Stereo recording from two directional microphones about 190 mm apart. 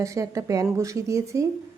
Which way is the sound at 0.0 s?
15° right (ahead or behind).